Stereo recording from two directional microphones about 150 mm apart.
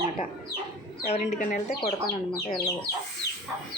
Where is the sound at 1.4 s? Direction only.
65° left (ahead or behind).